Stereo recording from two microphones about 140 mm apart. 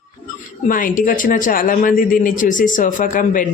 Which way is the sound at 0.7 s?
75° left (ahead or behind).